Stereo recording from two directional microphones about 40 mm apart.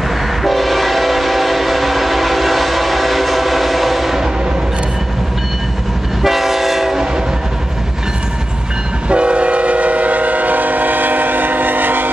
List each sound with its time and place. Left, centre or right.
0.4 s train: centre
6.2 s train: centre
9.1 s train: right